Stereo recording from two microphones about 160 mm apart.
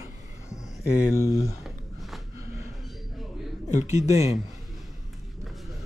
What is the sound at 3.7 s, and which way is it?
Speech, 45° left (ahead or behind).